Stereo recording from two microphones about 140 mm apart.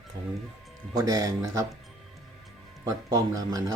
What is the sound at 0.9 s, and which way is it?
Speech, 25° right (ahead or behind).